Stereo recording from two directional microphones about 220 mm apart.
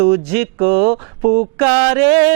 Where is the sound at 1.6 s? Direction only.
15° right (ahead or behind).